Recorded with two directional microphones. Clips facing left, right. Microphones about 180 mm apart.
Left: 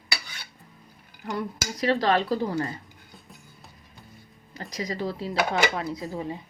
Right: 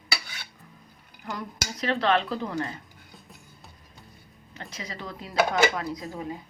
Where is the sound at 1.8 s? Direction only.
35° left (ahead or behind).